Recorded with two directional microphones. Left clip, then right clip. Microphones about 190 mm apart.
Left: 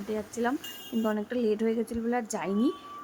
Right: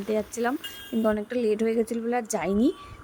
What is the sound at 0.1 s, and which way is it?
A woman's voice, 20° right (ahead or behind).